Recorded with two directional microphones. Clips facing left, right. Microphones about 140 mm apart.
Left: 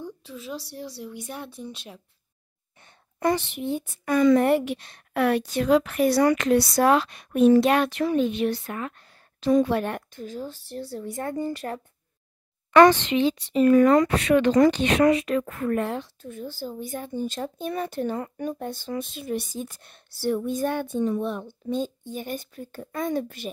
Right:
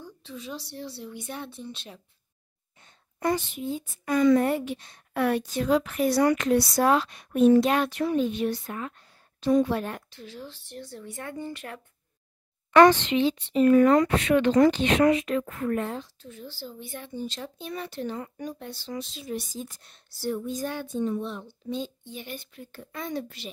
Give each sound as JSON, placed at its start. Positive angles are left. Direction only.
{"t": 0.0, "sound": "speech", "side_deg": 10}
{"t": 2.8, "sound": "a woman's voice", "side_deg": 80}
{"t": 10.2, "sound": "speech", "side_deg": 45}
{"t": 13.1, "sound": "speech", "side_deg": 60}